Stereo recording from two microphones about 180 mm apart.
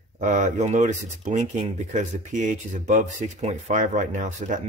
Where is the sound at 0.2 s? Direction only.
45° right (ahead or behind).